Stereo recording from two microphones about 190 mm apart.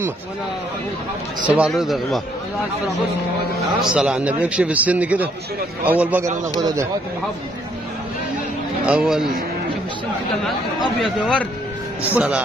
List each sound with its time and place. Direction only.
1.5 s speech: 5° right (ahead or behind)
3.8 s a man's voice: 5° right (ahead or behind)
6.6 s speech: 20° right (ahead or behind)
8.8 s speech: 5° right (ahead or behind)
11.0 s speech: centre (ahead or behind)